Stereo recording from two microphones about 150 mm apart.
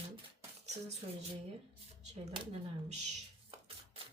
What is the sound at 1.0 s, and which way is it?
Speech, 45° right (ahead or behind).